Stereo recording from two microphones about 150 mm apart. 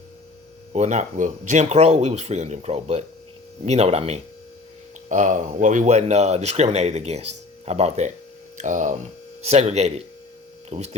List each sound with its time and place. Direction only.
0.7 s speech: 50° right (ahead or behind)
5.0 s speech: 55° right (ahead or behind)
8.5 s speech: 55° right (ahead or behind)
9.4 s speech: 45° right (ahead or behind)